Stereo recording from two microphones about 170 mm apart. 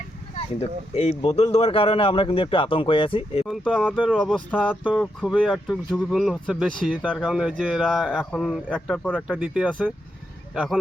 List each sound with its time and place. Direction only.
0.3 s speech: 35° left (ahead or behind)
3.4 s speech: 5° right (ahead or behind)
4.9 s speech: 5° right (ahead or behind)